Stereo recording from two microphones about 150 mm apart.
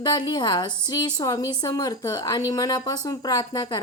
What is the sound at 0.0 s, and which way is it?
Speech, 30° left (ahead or behind).